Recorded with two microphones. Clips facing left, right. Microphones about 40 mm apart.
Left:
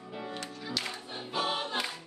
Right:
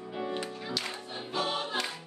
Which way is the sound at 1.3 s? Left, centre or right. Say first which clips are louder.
Even; centre.